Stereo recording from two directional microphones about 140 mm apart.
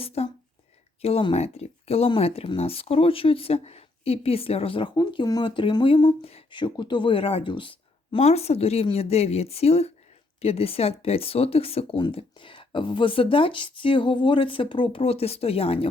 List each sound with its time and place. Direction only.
0.0 s speech: 45° left (ahead or behind)